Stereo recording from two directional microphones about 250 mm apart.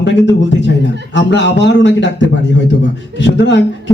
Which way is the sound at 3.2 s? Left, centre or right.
Left.